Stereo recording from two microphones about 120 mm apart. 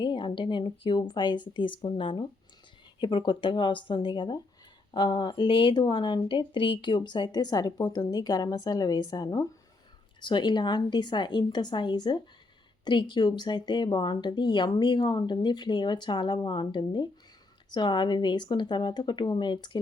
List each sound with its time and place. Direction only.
0.0 s speech: 40° left (ahead or behind)